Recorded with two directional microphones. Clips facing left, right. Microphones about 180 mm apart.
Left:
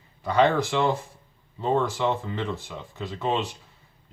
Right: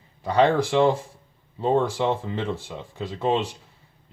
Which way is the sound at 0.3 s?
35° right (ahead or behind).